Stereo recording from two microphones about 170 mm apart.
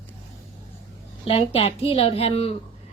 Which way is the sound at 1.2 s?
35° left (ahead or behind).